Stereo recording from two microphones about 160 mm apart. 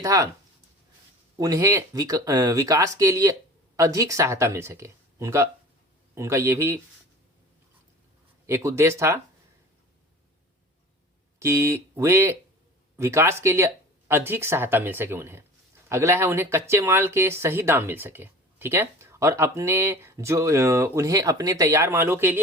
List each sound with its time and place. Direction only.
0.0 s speech: 20° right (ahead or behind)
1.4 s speech: 20° right (ahead or behind)
8.4 s speech: 15° right (ahead or behind)
11.3 s speech: 15° right (ahead or behind)